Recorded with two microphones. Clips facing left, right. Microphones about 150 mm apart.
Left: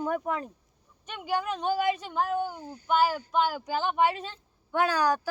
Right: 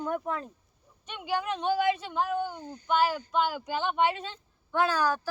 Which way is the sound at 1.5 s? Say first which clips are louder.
Right 2 dB; 5° left (ahead or behind).